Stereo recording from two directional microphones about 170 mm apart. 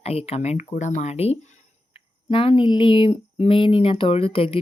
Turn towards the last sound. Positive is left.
turn(degrees=35)  # may be behind; listen again after turning